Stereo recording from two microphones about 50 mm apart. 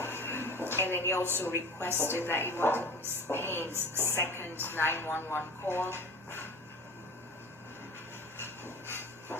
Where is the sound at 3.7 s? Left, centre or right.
Right.